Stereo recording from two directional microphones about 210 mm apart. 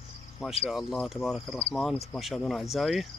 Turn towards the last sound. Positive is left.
turn(degrees=0)  # may be behind; listen again after turning